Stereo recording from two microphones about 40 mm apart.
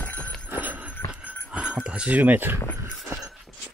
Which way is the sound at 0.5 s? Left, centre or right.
Right.